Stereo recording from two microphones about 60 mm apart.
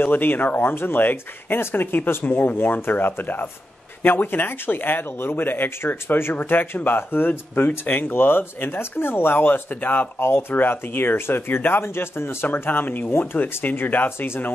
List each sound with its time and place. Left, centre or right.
0.0 s speech: left
12.6 s speech: left